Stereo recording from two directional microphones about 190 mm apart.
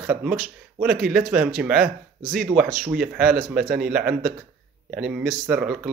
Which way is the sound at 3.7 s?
5° right (ahead or behind).